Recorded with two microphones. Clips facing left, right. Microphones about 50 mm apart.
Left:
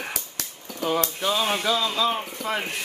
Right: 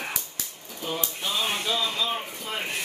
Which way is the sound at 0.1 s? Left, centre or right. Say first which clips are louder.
Left 1 dB; left.